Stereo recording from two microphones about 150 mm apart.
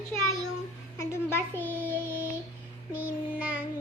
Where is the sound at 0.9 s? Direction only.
15° left (ahead or behind).